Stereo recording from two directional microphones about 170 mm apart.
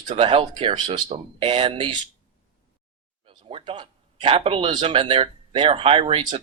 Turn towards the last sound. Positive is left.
turn(degrees=-30)  # may be behind; listen again after turning